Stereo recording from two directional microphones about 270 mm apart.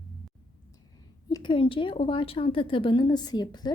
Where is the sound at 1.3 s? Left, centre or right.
Centre.